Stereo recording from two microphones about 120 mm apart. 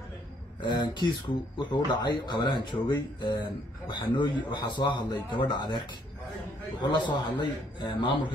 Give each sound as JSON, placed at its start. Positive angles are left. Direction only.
{"t": 0.6, "sound": "speech", "side_deg": 35}
{"t": 6.8, "sound": "speech", "side_deg": 40}